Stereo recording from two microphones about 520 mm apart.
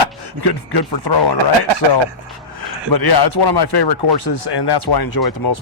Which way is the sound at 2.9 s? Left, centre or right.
Left.